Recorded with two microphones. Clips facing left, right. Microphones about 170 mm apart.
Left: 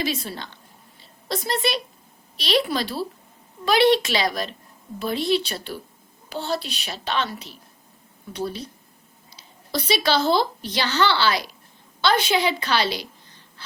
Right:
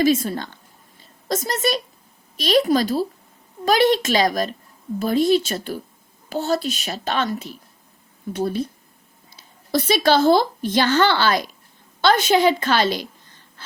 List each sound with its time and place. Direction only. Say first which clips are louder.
0.0 s a woman's voice: right 9 dB; 45° right (ahead or behind)